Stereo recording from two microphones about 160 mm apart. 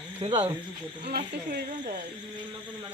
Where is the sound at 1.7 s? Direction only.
55° right (ahead or behind).